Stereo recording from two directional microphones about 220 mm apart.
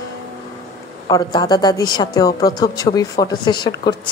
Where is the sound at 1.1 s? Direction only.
20° left (ahead or behind).